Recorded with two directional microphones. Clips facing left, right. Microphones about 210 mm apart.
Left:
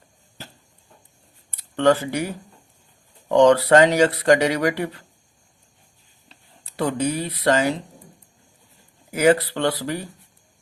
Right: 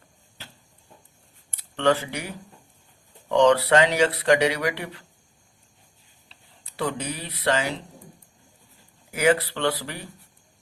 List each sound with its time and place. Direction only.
1.7 s speech: 40° left (ahead or behind)
3.2 s speech: 45° left (ahead or behind)
6.7 s speech: 45° left (ahead or behind)
9.1 s speech: 40° left (ahead or behind)